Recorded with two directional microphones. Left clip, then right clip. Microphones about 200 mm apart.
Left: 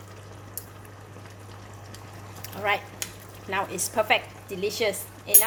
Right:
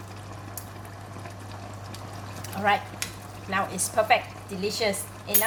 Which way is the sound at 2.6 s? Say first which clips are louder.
Right 2 dB; 35° left (ahead or behind).